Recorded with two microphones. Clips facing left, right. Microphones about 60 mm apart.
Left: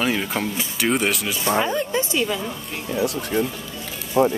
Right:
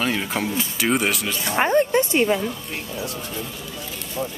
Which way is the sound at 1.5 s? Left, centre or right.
Right.